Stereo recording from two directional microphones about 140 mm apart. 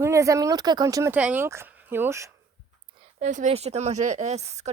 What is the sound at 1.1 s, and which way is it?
Speech, 10° right (ahead or behind).